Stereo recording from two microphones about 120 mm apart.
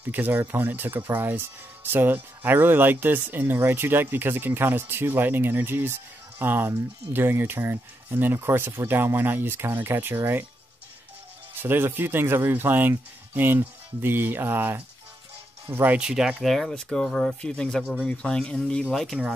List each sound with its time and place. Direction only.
0.1 s speech: 15° right (ahead or behind)
11.6 s speech: 20° right (ahead or behind); by 19.1 s centre (ahead or behind)